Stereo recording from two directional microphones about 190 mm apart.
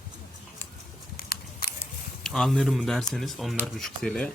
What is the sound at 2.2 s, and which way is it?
Speech, 5° left (ahead or behind).